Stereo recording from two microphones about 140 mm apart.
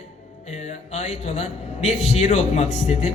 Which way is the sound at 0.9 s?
50° left (ahead or behind).